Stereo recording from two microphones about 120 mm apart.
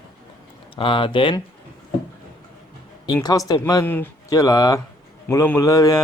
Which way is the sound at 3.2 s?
30° left (ahead or behind).